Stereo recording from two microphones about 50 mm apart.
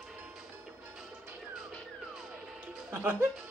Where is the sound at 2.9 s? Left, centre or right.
Right.